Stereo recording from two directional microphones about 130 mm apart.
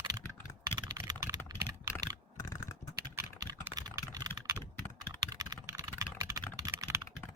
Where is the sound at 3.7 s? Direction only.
30° right (ahead or behind).